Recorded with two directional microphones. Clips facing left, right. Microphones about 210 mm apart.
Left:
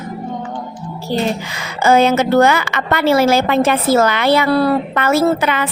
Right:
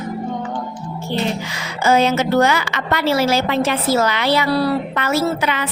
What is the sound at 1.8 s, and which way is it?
A woman's voice, 55° left (ahead or behind).